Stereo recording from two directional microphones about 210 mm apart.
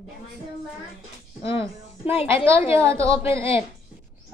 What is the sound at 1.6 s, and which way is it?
Speech, 25° left (ahead or behind).